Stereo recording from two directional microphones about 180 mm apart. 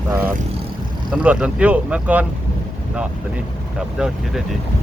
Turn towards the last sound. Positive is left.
turn(degrees=-5)  # may be behind; listen again after turning